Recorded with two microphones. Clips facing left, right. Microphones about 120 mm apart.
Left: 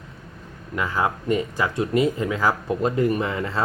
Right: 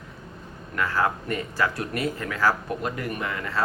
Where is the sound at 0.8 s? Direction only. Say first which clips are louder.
Left 1 dB; 15° left (ahead or behind).